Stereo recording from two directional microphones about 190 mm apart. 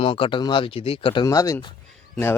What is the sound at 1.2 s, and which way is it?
Speech, 20° left (ahead or behind).